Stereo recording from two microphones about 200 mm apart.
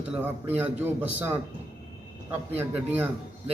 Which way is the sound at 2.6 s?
10° right (ahead or behind).